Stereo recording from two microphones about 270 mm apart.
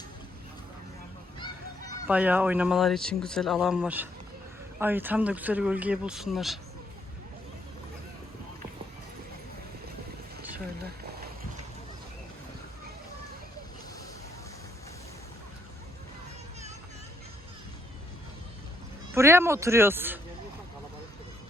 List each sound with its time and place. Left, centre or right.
2.0 s speech: centre
19.1 s speech: centre